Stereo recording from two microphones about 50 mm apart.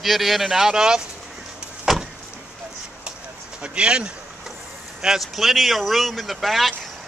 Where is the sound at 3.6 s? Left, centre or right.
Right.